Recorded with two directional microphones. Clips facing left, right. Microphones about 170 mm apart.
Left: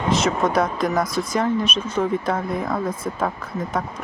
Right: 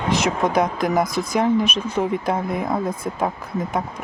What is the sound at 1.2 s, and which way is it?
Speech, 20° right (ahead or behind).